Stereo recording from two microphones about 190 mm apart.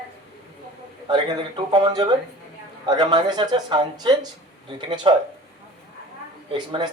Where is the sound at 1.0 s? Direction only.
25° right (ahead or behind).